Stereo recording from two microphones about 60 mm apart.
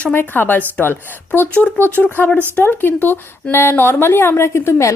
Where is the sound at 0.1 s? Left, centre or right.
Left.